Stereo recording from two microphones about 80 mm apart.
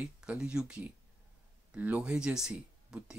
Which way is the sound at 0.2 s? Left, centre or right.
Centre.